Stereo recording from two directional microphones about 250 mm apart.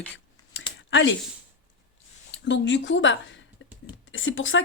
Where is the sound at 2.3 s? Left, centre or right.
Left.